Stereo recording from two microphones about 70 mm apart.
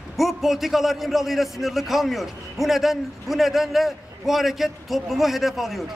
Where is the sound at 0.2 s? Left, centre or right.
Centre.